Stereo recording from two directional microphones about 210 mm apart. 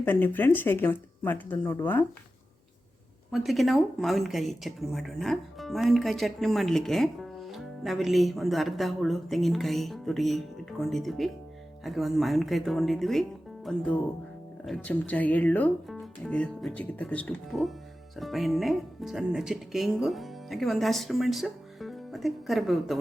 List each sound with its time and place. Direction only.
0.0 s speech: 10° left (ahead or behind)
3.3 s speech: centre (ahead or behind)